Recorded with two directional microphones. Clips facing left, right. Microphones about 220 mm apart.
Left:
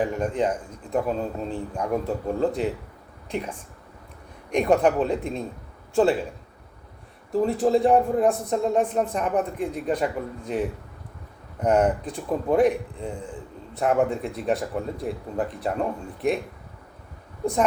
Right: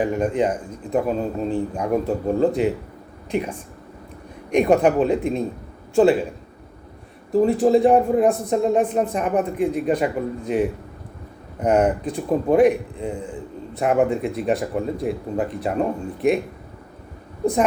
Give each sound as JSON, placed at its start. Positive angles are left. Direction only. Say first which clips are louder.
{"t": 0.0, "sound": "a man's voice", "louder": "right 4 dB", "side_deg": -15}
{"t": 4.5, "sound": "a man's voice", "louder": "right 4 dB", "side_deg": -15}
{"t": 7.6, "sound": "a man's voice", "louder": "right 2 dB", "side_deg": -15}